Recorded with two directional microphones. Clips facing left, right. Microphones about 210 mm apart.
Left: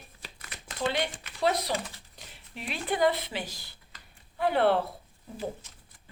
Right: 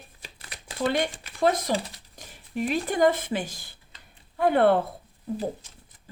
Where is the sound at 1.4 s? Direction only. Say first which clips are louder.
Right 4 dB; 50° right (ahead or behind).